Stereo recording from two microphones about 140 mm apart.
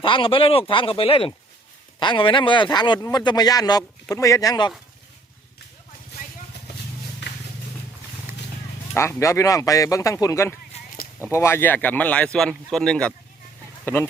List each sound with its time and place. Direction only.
0.0 s speech: 40° left (ahead or behind)
9.0 s speech: 20° left (ahead or behind)